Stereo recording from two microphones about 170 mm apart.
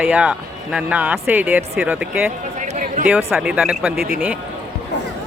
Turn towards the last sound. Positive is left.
turn(degrees=-5)  # may be behind; listen again after turning